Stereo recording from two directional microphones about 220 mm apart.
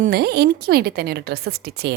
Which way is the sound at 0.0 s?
45° right (ahead or behind).